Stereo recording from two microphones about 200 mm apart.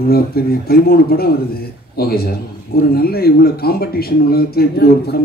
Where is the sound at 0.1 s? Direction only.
50° left (ahead or behind).